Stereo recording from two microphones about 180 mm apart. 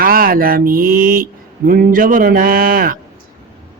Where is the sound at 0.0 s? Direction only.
55° right (ahead or behind).